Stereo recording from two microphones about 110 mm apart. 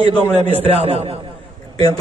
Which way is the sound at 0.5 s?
65° right (ahead or behind).